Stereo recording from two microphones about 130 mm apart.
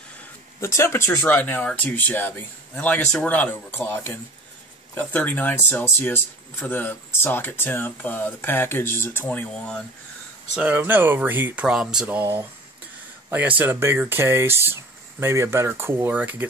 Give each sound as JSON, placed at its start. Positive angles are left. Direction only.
{"t": 0.6, "sound": "speech", "side_deg": 20}
{"t": 10.5, "sound": "speech", "side_deg": -10}
{"t": 12.2, "sound": "speech", "side_deg": -15}